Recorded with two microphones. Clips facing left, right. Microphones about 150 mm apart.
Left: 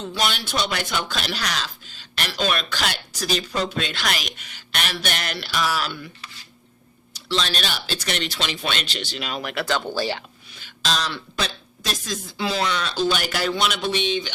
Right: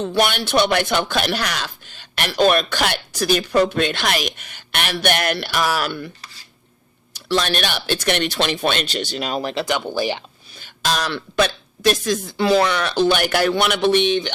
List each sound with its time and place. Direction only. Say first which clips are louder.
0.0 s speech: right 7 dB; 60° right (ahead or behind)
7.1 s speech: right 5 dB; 60° right (ahead or behind); by 9.6 s 30° right (ahead or behind)
9.6 s speech: right 2 dB; 15° right (ahead or behind)
10.9 s speech: right 8 dB; 60° right (ahead or behind)